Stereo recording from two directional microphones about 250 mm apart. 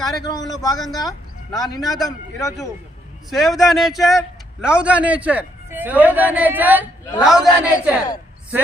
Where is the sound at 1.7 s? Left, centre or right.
Centre.